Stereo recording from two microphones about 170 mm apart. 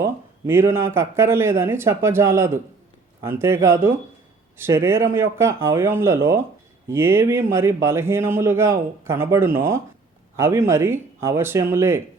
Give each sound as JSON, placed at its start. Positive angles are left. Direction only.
{"t": 0.0, "sound": "speech", "side_deg": -15}